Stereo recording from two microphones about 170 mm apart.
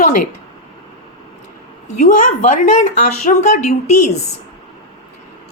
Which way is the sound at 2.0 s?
50° left (ahead or behind).